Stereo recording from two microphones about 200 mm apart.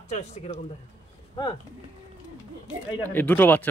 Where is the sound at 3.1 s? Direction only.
10° left (ahead or behind).